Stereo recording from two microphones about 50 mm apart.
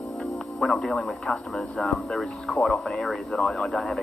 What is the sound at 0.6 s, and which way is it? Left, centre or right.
Speech, centre.